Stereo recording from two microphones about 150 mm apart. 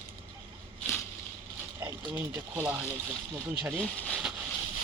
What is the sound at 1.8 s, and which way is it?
Speech, 15° right (ahead or behind).